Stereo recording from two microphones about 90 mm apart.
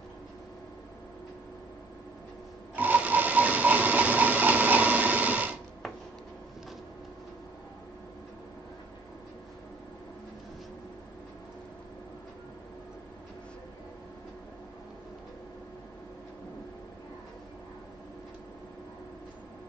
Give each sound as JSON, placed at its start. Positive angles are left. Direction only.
{"t": 2.7, "sound": "sewing machine", "side_deg": -20}